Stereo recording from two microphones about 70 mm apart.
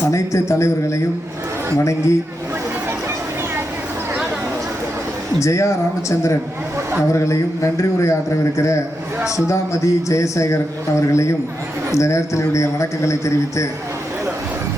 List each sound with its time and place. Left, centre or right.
0.1 s a man's voice: left
5.4 s a man's voice: left